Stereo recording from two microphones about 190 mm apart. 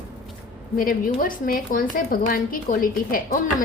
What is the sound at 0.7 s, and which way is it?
Speech, 50° left (ahead or behind).